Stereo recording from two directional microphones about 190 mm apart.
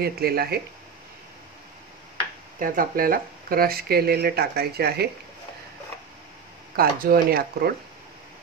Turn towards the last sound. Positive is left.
turn(degrees=-50)  # may be behind; listen again after turning